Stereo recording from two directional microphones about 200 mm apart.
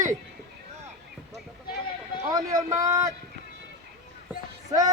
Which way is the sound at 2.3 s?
15° right (ahead or behind).